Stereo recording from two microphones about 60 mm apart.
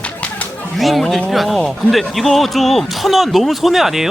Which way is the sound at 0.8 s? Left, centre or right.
Centre.